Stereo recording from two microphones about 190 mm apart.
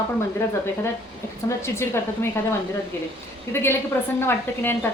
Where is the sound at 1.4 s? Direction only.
15° left (ahead or behind).